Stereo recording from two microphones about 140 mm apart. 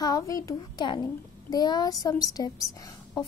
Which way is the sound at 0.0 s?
25° left (ahead or behind).